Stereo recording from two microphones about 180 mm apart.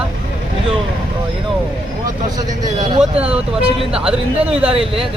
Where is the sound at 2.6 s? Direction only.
25° right (ahead or behind).